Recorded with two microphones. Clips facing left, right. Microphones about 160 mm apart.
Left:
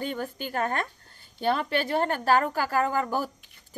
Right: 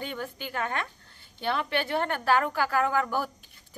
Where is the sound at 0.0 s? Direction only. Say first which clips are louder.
Left 4 dB; 40° left (ahead or behind).